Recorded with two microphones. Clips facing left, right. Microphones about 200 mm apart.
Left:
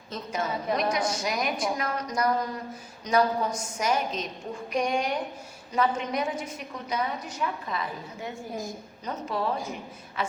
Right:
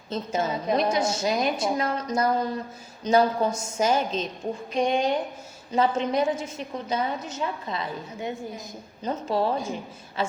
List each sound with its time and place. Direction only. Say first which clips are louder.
0.1 s a woman's voice: right 4 dB; 25° right (ahead or behind)